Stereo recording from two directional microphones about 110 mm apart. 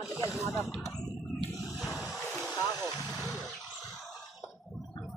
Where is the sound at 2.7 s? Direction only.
25° right (ahead or behind).